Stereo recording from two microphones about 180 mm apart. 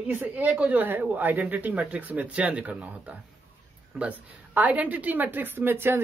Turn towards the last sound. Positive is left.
turn(degrees=-10)  # may be behind; listen again after turning